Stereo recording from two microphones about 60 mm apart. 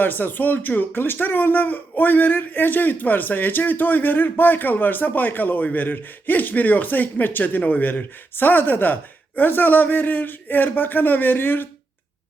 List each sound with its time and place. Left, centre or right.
0.0 s speech: left